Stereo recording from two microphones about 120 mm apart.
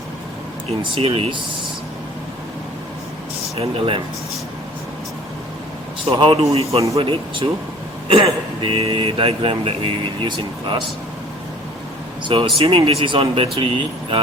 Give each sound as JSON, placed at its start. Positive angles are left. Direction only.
{"t": 0.8, "sound": "speech", "side_deg": -50}
{"t": 3.6, "sound": "speech", "side_deg": -50}
{"t": 6.1, "sound": "speech", "side_deg": -45}
{"t": 6.7, "sound": "speech", "side_deg": -25}
{"t": 7.0, "sound": "speech", "side_deg": -50}
{"t": 12.2, "sound": "speech", "side_deg": -45}